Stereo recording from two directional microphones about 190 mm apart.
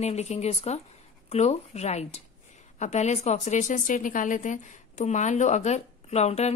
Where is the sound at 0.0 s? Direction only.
35° left (ahead or behind).